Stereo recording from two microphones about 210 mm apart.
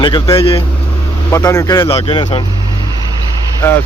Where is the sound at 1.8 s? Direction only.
25° left (ahead or behind).